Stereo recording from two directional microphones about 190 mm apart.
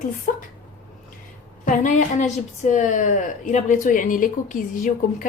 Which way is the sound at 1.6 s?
40° left (ahead or behind).